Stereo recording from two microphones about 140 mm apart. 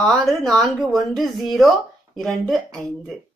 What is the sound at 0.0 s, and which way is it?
Speech, centre (ahead or behind).